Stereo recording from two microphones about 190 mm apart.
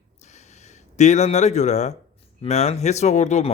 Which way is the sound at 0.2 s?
35° left (ahead or behind).